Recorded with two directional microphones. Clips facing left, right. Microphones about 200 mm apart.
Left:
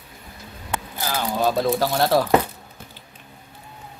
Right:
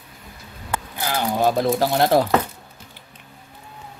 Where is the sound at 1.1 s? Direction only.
15° right (ahead or behind).